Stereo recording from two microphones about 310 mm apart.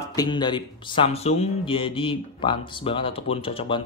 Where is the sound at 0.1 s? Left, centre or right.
Centre.